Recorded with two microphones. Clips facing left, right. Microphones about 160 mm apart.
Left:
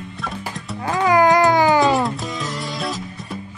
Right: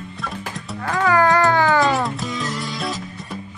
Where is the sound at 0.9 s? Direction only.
15° left (ahead or behind).